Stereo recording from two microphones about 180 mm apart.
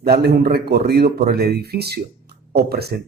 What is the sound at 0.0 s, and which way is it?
Speech, 60° right (ahead or behind).